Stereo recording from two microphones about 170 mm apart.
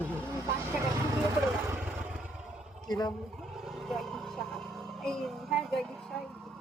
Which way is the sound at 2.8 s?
25° left (ahead or behind).